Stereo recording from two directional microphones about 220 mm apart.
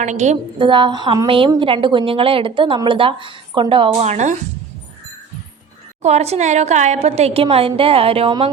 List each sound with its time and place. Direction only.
0.0 s a woman's voice: 35° right (ahead or behind)
6.0 s a woman's voice: 30° right (ahead or behind)